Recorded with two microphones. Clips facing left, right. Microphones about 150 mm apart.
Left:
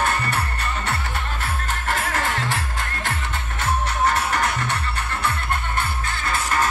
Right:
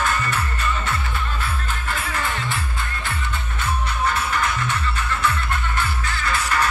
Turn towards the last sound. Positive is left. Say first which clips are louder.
# right 1 dB
turn(degrees=50)  # may be behind; listen again after turning